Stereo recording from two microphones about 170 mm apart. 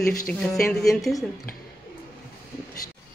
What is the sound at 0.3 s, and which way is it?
Speech, 5° left (ahead or behind).